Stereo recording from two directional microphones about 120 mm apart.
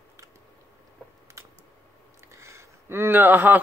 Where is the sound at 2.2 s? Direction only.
25° right (ahead or behind).